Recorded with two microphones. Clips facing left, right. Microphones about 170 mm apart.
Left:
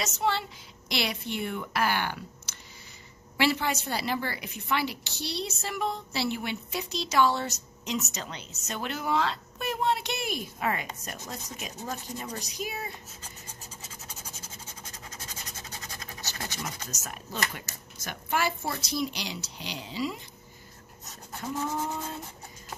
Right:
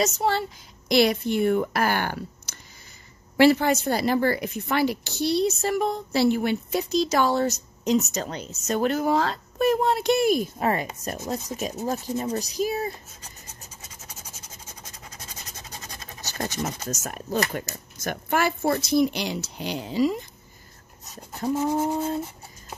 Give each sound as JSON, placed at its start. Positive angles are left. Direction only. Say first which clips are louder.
{"t": 0.0, "sound": "a woman's voice", "louder": "right 6 dB", "side_deg": -40}
{"t": 16.2, "sound": "a woman's voice", "louder": "right 9 dB", "side_deg": -45}
{"t": 21.4, "sound": "speech", "louder": "right 8 dB", "side_deg": -40}